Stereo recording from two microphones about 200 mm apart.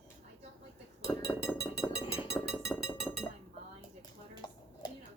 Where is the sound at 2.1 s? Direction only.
15° left (ahead or behind).